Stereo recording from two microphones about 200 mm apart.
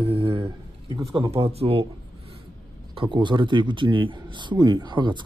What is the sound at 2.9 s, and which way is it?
Speech, 25° right (ahead or behind).